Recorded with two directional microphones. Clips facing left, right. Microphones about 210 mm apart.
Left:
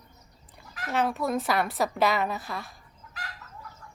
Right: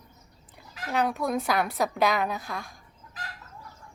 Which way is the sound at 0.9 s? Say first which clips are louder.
Even; centre (ahead or behind).